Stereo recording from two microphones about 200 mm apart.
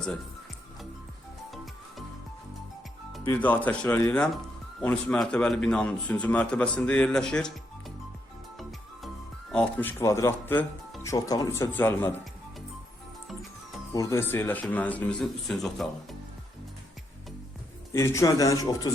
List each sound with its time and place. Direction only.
3.2 s a man's voice: 10° left (ahead or behind)
9.5 s speech: 5° left (ahead or behind)
13.9 s speech: 15° left (ahead or behind)
17.9 s speech: 15° left (ahead or behind)